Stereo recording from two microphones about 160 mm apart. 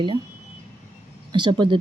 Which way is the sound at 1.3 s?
30° right (ahead or behind).